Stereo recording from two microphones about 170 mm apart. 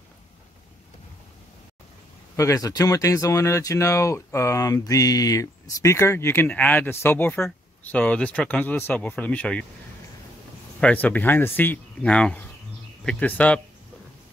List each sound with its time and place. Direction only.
2.3 s speech: 20° left (ahead or behind)
10.8 s speech: 10° left (ahead or behind)